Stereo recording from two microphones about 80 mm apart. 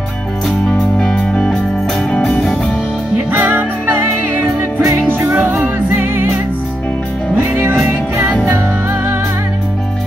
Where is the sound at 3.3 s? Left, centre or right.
Right.